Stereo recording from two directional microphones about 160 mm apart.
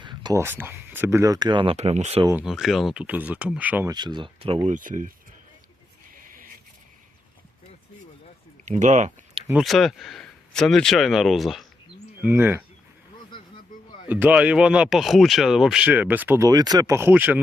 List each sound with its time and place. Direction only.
0.0 s a sound: 30° right (ahead or behind)
0.4 s speech: 15° right (ahead or behind); by 2.2 s 40° right (ahead or behind)
2.4 s speech: centre (ahead or behind)
3.8 s speech: 25° right (ahead or behind)
4.7 s speech: 55° right (ahead or behind)
6.1 s a sound: 60° right (ahead or behind)
8.6 s speech: 50° right (ahead or behind)
9.6 s speech: centre (ahead or behind)
12.2 s speech: 15° right (ahead or behind)
14.1 s speech: 10° right (ahead or behind)